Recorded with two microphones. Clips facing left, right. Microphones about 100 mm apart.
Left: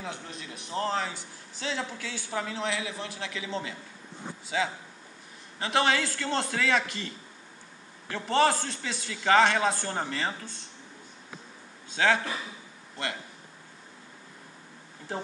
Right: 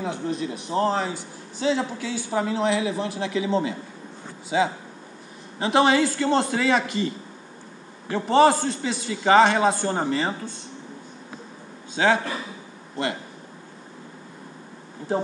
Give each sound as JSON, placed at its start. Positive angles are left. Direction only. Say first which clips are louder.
{"t": 0.0, "sound": "a man's voice", "louder": "right 12 dB", "side_deg": -20}
{"t": 11.9, "sound": "a man's voice", "louder": "right 4 dB", "side_deg": -15}